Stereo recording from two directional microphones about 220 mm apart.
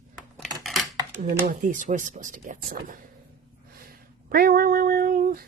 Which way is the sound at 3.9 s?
40° right (ahead or behind).